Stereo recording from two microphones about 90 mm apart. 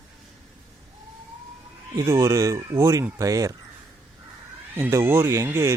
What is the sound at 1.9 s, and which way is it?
Speech, 35° right (ahead or behind).